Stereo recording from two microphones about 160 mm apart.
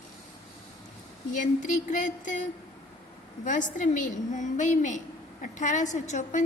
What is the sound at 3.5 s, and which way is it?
A woman's voice, 55° left (ahead or behind).